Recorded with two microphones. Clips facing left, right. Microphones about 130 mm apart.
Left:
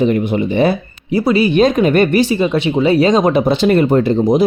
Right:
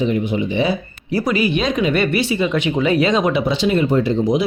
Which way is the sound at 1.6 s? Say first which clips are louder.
Left 7 dB; 50° left (ahead or behind).